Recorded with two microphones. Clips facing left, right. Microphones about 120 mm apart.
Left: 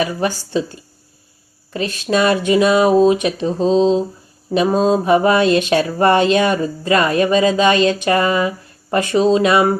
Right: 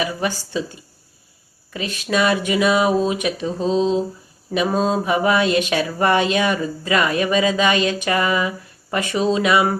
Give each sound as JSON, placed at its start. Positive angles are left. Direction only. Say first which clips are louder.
{"t": 0.0, "sound": "speech", "louder": "left 4 dB", "side_deg": 35}
{"t": 1.7, "sound": "speech", "louder": "left 4 dB", "side_deg": 35}
{"t": 4.5, "sound": "mantra", "louder": "left 5 dB", "side_deg": 30}
{"t": 5.1, "sound": "speech", "louder": "left 4 dB", "side_deg": 35}